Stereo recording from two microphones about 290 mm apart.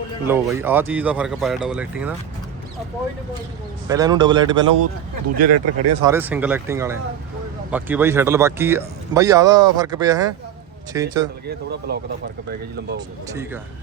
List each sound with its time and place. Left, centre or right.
0.3 s speech: centre
3.8 s speech: centre
5.4 s speech: right
6.0 s speech: centre
11.4 s speech: right
13.0 s speech: centre